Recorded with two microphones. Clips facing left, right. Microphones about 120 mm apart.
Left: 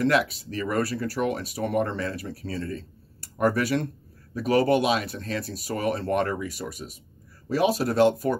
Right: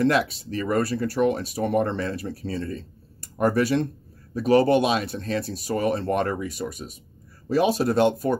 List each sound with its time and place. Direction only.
0.0 s speech: 30° right (ahead or behind)